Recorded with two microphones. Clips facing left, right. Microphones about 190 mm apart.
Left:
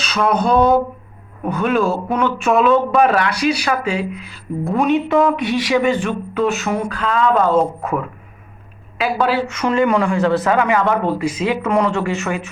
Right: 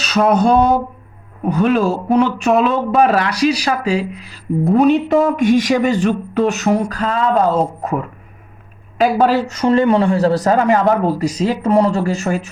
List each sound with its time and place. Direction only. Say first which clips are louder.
0.0 s speech: right 4 dB; 40° right (ahead or behind)
9.0 s speech: right 4 dB; 40° right (ahead or behind)